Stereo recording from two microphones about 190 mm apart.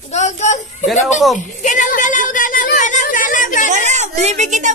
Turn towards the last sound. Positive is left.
turn(degrees=-40)  # may be behind; listen again after turning